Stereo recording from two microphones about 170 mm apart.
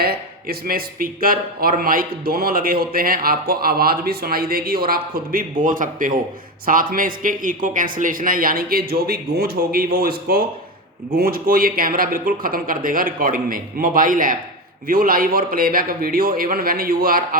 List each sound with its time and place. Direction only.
0.0 s a man's voice: 65° right (ahead or behind)